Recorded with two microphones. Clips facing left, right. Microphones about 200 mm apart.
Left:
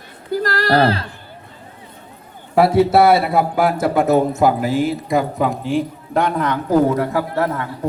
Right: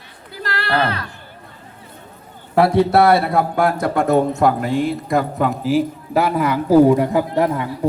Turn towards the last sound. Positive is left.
turn(degrees=-15)  # may be behind; listen again after turning